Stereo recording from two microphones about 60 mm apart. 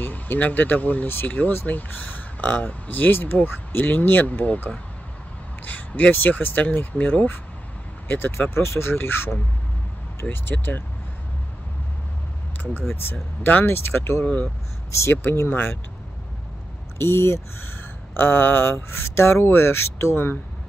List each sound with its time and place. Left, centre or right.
0.0 s speech: left
5.6 s speech: left
8.1 s speech: left
10.3 s speech: left
12.9 s speech: left
14.2 s speech: left
14.9 s speech: left
17.0 s speech: left